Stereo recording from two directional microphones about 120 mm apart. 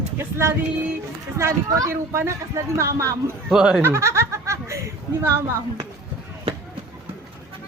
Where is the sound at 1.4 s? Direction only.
20° right (ahead or behind).